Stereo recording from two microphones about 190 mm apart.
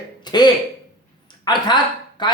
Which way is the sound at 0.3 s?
20° left (ahead or behind).